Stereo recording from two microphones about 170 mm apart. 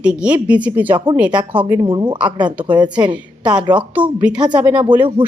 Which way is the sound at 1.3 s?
25° right (ahead or behind).